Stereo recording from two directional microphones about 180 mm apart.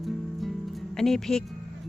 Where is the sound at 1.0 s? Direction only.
Centre (ahead or behind).